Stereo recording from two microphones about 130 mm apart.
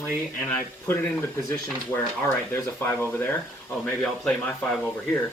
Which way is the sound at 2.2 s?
20° left (ahead or behind).